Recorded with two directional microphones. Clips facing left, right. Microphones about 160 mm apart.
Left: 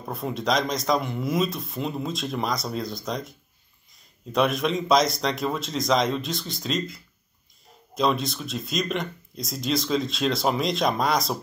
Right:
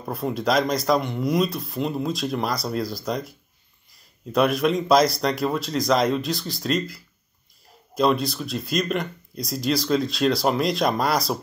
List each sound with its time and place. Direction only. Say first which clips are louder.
0.0 s speech: right 3 dB; centre (ahead or behind)